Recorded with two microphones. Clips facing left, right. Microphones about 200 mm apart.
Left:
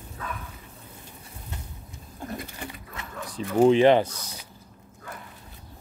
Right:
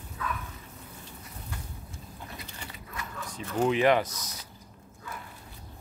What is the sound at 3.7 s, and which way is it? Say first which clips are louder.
Speech: left 5 dB; 30° left (ahead or behind).